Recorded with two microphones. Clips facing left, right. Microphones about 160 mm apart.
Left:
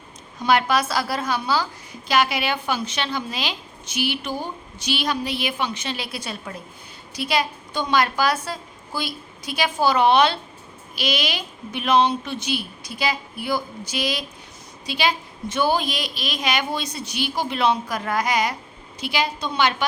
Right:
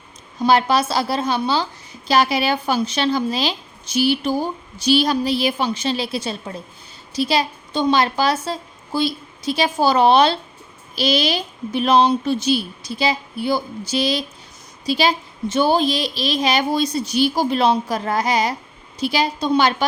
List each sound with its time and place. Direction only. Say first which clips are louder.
0.3 s a woman's voice: right 3 dB; 30° right (ahead or behind)